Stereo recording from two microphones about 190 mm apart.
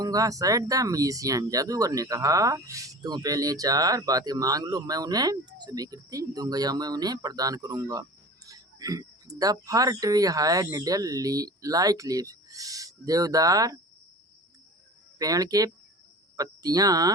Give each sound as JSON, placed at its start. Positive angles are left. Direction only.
{"t": 0.0, "sound": "speech", "side_deg": -20}
{"t": 15.2, "sound": "speech", "side_deg": -20}